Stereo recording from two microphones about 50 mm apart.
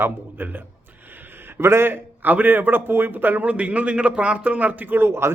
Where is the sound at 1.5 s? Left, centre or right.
Right.